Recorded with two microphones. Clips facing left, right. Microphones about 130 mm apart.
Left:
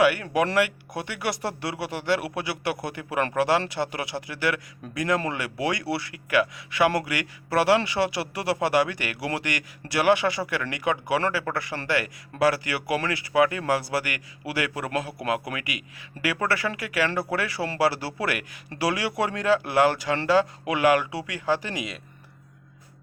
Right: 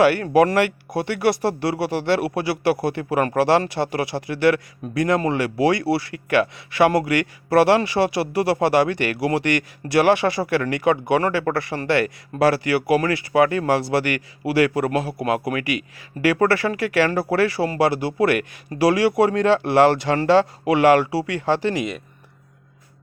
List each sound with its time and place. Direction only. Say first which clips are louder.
0.0 s speech: right 6 dB; 30° right (ahead or behind)